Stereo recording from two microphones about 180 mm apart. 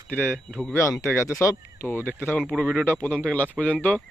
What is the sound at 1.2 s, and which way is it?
Speech, 15° left (ahead or behind).